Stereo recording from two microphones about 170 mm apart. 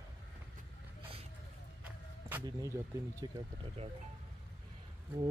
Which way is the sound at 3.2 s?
25° right (ahead or behind).